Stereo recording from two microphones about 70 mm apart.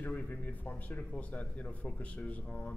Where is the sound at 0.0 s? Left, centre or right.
Left.